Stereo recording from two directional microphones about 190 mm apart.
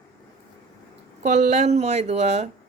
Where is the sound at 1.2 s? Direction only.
40° right (ahead or behind).